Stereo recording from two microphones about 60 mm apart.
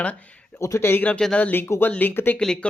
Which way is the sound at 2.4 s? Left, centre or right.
Centre.